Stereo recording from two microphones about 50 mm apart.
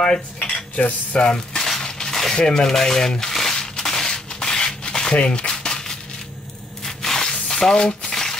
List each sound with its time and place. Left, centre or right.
0.0 s cutlery: centre
0.7 s cutlery: left
1.2 s cutlery: centre
1.7 s crushing: centre
2.3 s a sound: centre
6.8 s squish: centre
7.4 s frying: centre